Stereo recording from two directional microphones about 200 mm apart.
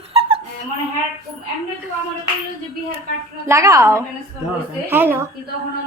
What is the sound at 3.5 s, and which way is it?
Speech, 15° right (ahead or behind).